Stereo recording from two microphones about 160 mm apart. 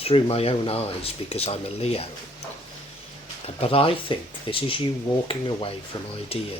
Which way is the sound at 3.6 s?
35° left (ahead or behind).